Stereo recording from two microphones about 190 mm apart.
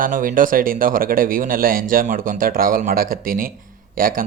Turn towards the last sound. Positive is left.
turn(degrees=-50)  # may be behind; listen again after turning